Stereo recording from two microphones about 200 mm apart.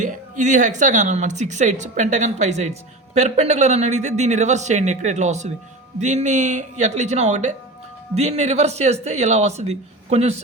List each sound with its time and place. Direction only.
0.0 s a woman's voice: 40° right (ahead or behind)